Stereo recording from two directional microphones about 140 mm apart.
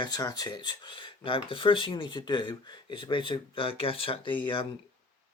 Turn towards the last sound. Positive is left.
turn(degrees=35)  # may be behind; listen again after turning